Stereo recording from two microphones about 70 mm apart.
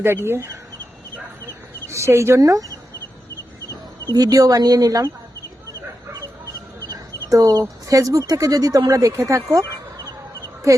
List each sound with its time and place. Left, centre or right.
0.0 s speech: right
1.9 s speech: right
4.1 s speech: right
6.9 s chicken: right
7.9 s speech: right